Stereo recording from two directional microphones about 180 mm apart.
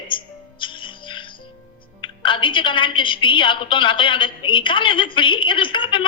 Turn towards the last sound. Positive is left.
turn(degrees=25)  # may be behind; listen again after turning